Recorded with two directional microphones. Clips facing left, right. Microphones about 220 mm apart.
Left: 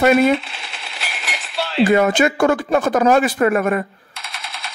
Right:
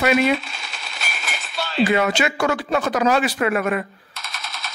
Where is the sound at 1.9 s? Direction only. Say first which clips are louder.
Left 8 dB; 45° left (ahead or behind).